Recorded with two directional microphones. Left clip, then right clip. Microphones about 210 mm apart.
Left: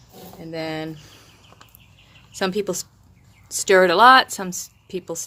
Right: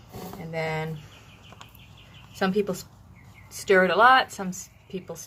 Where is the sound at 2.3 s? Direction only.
50° left (ahead or behind).